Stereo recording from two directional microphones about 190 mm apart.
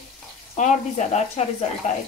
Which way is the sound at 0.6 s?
40° left (ahead or behind).